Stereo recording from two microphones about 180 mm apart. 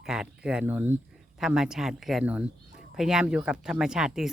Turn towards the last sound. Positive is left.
turn(degrees=-5)  # may be behind; listen again after turning